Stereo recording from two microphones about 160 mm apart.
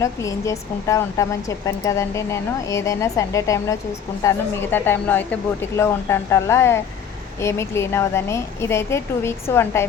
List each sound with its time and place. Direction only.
0.0 s speech: 20° left (ahead or behind)